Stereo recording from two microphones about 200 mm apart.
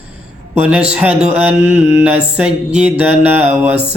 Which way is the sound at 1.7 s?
35° right (ahead or behind).